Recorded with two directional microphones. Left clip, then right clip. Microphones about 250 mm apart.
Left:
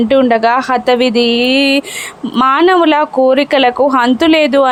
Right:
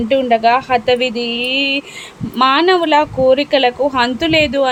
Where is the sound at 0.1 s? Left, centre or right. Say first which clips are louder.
Left 1 dB; left.